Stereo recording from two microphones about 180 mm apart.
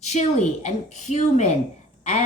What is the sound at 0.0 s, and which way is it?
A woman's voice, 40° left (ahead or behind).